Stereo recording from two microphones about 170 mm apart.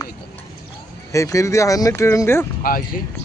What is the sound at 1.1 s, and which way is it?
Speech, 20° left (ahead or behind).